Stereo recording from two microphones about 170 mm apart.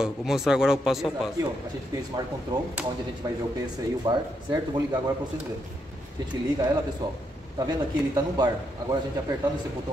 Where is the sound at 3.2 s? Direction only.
25° right (ahead or behind).